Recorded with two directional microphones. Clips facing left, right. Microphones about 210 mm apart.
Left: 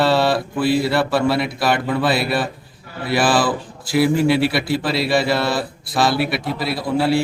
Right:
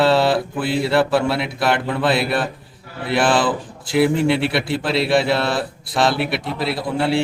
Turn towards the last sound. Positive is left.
turn(degrees=0)  # may be behind; listen again after turning